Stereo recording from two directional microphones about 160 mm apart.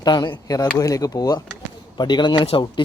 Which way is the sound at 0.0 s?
25° left (ahead or behind).